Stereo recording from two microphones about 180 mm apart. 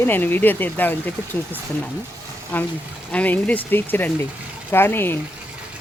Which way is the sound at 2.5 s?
10° left (ahead or behind).